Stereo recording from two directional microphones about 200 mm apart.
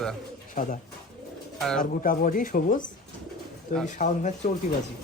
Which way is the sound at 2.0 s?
45° left (ahead or behind).